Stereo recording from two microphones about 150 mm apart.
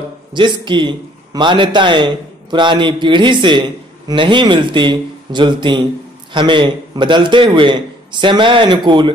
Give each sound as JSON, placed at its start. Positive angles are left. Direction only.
{"t": 0.3, "sound": "a man's voice", "side_deg": -30}